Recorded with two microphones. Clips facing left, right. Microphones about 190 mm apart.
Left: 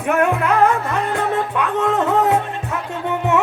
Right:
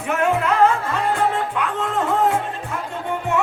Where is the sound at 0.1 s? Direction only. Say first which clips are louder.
Left 3 dB; 60° left (ahead or behind).